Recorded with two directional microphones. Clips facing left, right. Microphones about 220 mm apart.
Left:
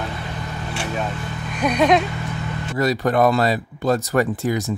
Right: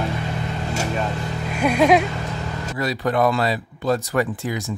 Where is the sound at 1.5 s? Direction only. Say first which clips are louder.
Right 1 dB; 10° right (ahead or behind).